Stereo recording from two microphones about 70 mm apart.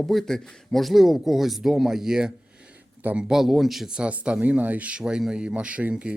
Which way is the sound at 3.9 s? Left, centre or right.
Centre.